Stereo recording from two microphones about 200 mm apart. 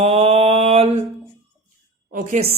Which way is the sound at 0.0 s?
30° right (ahead or behind).